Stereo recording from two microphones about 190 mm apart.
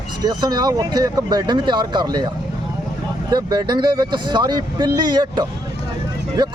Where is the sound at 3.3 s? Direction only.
20° right (ahead or behind).